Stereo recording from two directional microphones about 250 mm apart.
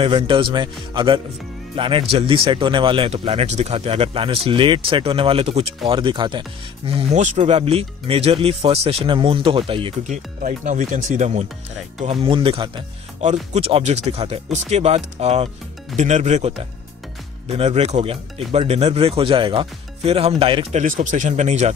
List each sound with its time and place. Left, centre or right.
0.0 s speech: centre